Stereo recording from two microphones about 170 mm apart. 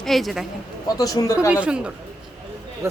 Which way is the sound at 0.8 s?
20° left (ahead or behind).